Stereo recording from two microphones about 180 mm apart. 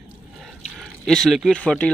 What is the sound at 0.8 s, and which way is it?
Speech, 5° left (ahead or behind).